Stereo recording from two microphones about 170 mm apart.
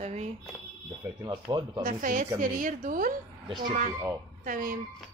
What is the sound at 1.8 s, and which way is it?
A woman's voice, 50° right (ahead or behind).